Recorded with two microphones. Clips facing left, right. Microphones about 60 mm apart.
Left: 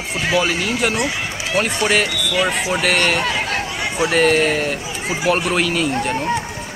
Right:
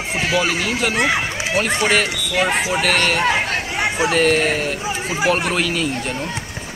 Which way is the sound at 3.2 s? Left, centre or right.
Right.